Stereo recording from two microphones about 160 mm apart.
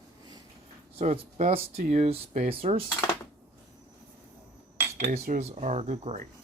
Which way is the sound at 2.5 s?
35° right (ahead or behind).